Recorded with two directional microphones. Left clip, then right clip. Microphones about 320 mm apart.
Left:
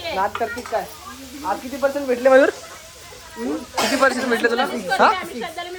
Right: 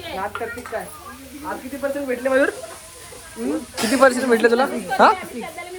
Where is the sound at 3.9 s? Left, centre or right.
Centre.